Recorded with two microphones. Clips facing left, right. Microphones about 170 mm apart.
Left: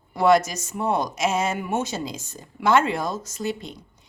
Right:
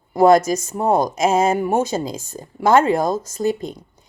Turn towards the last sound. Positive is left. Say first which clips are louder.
# right 8 dB
turn(degrees=-45)  # may be behind; listen again after turning